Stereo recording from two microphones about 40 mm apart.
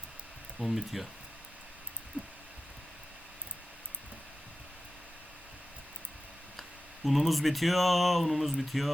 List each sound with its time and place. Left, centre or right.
0.6 s speech: centre
2.2 s a sound: right
6.6 s speech: centre